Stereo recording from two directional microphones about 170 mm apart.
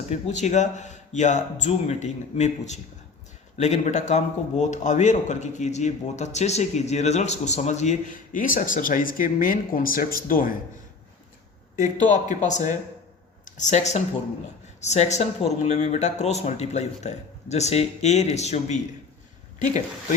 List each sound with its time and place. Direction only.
0.1 s a man's voice: 45° left (ahead or behind)
11.8 s a man's voice: 45° left (ahead or behind)